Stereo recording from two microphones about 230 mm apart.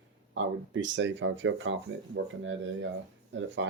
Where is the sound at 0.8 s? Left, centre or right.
Right.